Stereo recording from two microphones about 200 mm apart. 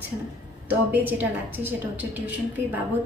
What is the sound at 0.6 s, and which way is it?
A woman's voice, 10° right (ahead or behind).